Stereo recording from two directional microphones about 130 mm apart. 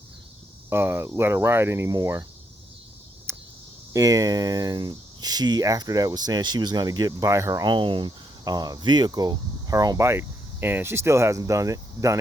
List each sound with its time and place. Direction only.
0.7 s speech: 20° right (ahead or behind)
3.3 s cricket: 20° right (ahead or behind)
3.9 s speech: 30° right (ahead or behind)